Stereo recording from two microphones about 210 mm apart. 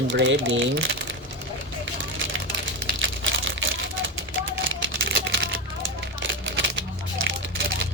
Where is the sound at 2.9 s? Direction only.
65° right (ahead or behind).